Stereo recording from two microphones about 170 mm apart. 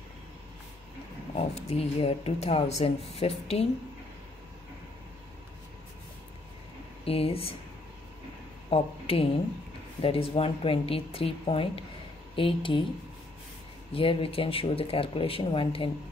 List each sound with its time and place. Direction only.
1.3 s speech: 35° left (ahead or behind)
7.1 s speech: 35° left (ahead or behind)
8.6 s speech: 35° left (ahead or behind)
13.9 s speech: 30° left (ahead or behind)